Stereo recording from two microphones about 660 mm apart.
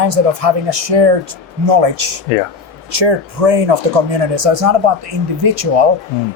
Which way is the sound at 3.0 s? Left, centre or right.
Right.